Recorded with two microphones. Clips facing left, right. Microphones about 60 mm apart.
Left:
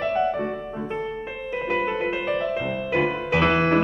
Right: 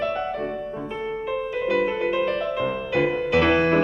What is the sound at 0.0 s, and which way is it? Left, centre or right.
Music, left.